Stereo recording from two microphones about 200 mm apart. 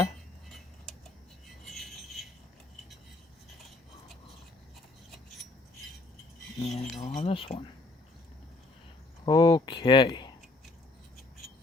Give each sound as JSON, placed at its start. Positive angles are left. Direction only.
{"t": 1.6, "sound": "a sound", "side_deg": 0}
{"t": 6.7, "sound": "speech", "side_deg": 35}
{"t": 7.3, "sound": "speech", "side_deg": 25}
{"t": 9.2, "sound": "speech", "side_deg": 20}